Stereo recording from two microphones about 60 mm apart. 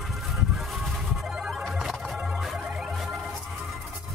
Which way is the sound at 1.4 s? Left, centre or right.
Centre.